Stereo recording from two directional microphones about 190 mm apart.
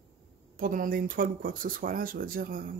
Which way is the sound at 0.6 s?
45° right (ahead or behind).